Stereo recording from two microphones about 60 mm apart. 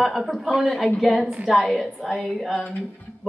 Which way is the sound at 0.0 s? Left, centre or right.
Centre.